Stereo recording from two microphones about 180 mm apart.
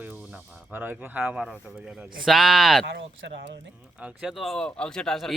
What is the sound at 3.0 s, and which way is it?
Speech, 80° right.